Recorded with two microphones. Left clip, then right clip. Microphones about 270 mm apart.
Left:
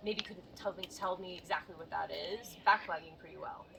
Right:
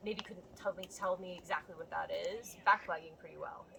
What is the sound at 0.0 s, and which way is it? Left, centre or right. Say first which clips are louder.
A woman's voice: left 3 dB; centre.